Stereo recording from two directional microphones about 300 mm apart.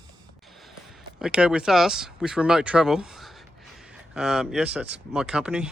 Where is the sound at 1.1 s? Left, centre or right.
Centre.